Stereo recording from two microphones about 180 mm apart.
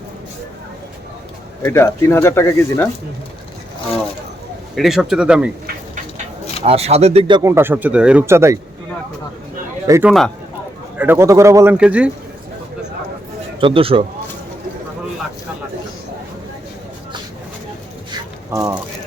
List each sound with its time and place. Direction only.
1.6 s speech: 15° left (ahead or behind)
4.7 s speech: centre (ahead or behind)
6.6 s speech: 35° right (ahead or behind)
7.4 s a man's voice: 15° right (ahead or behind)
9.8 s a man's voice: 15° right (ahead or behind)
10.1 s speech: centre (ahead or behind)
10.9 s a man's voice: 10° right (ahead or behind)
13.6 s speech: 30° right (ahead or behind)
18.5 s a man's voice: 15° right (ahead or behind)